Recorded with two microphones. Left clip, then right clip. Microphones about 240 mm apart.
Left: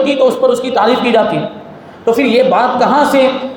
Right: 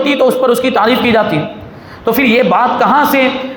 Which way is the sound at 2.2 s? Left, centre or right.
Right.